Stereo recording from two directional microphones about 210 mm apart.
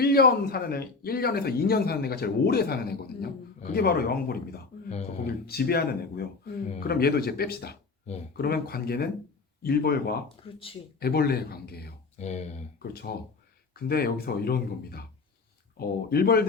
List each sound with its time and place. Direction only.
0.0 s speech: 45° left (ahead or behind)
4.9 s speech: 30° left (ahead or behind)
5.2 s speech: 50° left (ahead or behind)
10.2 s speech: 25° left (ahead or behind)
11.0 s speech: 50° left (ahead or behind)
12.1 s speech: 30° left (ahead or behind)
12.8 s speech: 50° left (ahead or behind)